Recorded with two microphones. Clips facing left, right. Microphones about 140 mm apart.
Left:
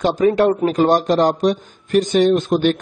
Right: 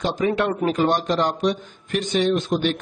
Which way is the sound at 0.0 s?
45° left (ahead or behind).